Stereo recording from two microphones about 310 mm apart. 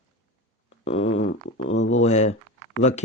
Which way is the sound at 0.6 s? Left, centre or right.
Centre.